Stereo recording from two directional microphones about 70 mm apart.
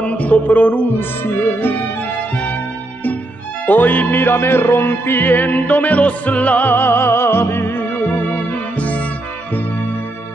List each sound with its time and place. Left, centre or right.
0.0 s music: left
3.6 s music: left